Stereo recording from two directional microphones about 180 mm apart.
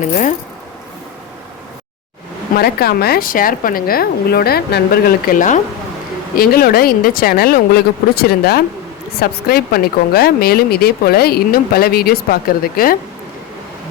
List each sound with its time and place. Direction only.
0.0 s speech: 45° left (ahead or behind)
2.6 s speech: 60° left (ahead or behind)